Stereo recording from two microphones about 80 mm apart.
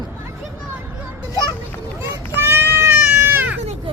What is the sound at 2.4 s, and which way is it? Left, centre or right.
Goat, right.